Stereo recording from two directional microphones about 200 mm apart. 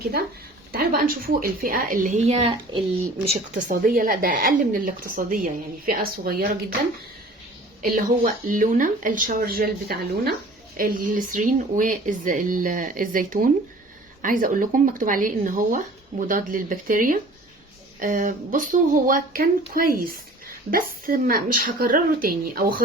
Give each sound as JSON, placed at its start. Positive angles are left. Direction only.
{"t": 0.7, "sound": "a woman's voice", "side_deg": -45}
{"t": 7.8, "sound": "a woman's voice", "side_deg": -45}